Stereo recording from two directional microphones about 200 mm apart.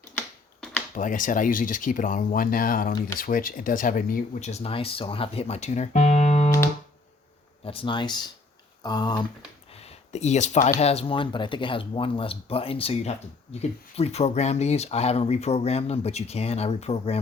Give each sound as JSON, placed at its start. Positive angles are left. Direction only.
{"t": 0.9, "sound": "speech", "side_deg": 40}
{"t": 7.6, "sound": "speech", "side_deg": 25}
{"t": 9.7, "sound": "a sound", "side_deg": 30}
{"t": 10.8, "sound": "speech", "side_deg": 30}